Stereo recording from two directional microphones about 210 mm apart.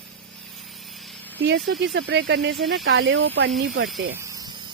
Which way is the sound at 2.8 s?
60° right (ahead or behind).